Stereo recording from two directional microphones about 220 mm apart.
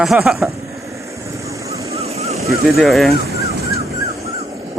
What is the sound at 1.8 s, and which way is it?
Vehicle, 30° right (ahead or behind).